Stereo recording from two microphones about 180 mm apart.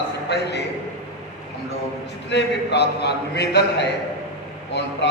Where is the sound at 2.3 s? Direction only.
70° left (ahead or behind).